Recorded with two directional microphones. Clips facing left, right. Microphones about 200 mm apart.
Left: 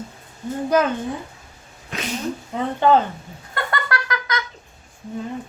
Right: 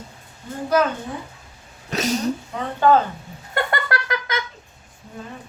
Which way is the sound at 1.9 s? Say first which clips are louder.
Right 6 dB; 40° right (ahead or behind).